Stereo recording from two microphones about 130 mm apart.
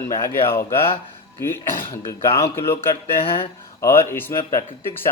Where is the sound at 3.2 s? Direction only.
45° left (ahead or behind).